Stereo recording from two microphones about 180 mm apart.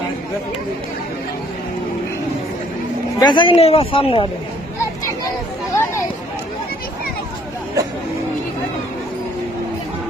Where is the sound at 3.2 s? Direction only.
25° left (ahead or behind).